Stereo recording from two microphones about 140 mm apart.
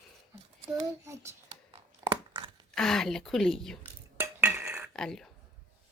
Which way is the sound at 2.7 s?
5° left (ahead or behind).